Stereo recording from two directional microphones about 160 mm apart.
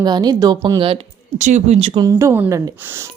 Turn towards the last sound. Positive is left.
turn(degrees=-15)  # may be behind; listen again after turning